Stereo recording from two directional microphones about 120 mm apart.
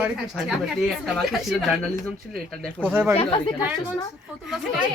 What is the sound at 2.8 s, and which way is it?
Speech, 15° right (ahead or behind).